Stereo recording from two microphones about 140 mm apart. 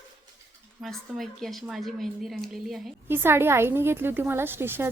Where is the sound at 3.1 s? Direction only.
15° right (ahead or behind).